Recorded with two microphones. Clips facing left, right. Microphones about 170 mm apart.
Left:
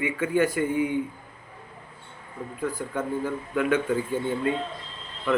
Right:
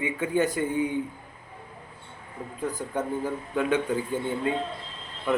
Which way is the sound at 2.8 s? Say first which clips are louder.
Right 1 dB; 20° right (ahead or behind).